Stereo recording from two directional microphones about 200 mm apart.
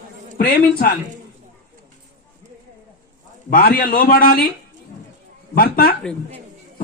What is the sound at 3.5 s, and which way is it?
Speech, 45° left (ahead or behind).